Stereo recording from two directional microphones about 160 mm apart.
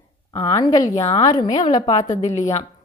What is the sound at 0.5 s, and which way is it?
A woman's voice, 20° left (ahead or behind).